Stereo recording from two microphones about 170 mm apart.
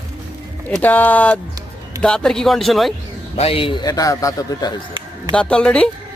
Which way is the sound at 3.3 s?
35° left (ahead or behind).